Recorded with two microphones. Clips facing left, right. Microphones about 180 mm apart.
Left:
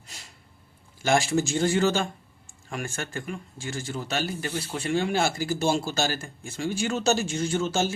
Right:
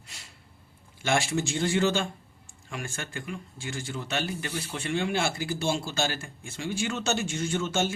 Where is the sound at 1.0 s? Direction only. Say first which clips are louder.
Left 4 dB; 40° left (ahead or behind).